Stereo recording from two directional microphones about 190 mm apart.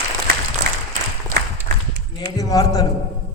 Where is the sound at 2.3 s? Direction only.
20° left (ahead or behind).